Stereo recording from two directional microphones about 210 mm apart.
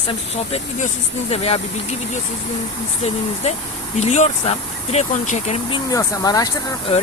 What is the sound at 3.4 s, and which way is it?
Speech, 35° left (ahead or behind).